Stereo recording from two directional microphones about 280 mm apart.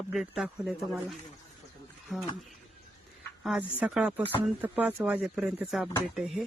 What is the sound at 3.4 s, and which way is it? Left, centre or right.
Speech, centre.